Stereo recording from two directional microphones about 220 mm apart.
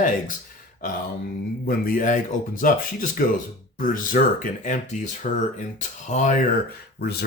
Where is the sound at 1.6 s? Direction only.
40° left (ahead or behind).